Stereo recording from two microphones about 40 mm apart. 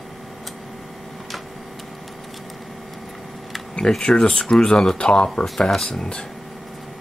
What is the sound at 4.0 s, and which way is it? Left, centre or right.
Speech, left.